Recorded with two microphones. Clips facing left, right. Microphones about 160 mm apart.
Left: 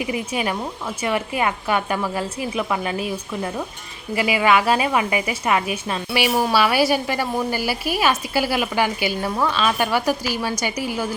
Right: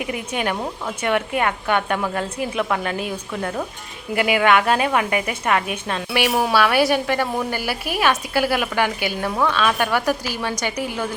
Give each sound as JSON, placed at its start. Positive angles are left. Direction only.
{"t": 0.0, "sound": "a woman's voice", "side_deg": 0}